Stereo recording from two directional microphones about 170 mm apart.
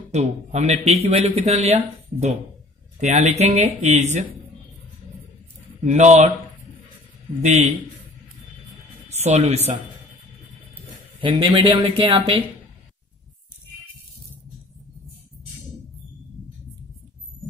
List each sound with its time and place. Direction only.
0.1 s speech: 40° right (ahead or behind)
5.9 s speech: 45° right (ahead or behind)
7.4 s speech: 40° right (ahead or behind)
9.1 s speech: 40° right (ahead or behind)
11.1 s speech: 30° right (ahead or behind)